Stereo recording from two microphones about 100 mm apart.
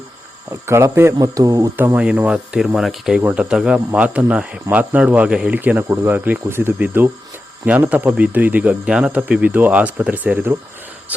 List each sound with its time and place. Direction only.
0.7 s speech: 25° right (ahead or behind)
1.2 s speech: 35° right (ahead or behind)
2.0 s a man's voice: 10° right (ahead or behind)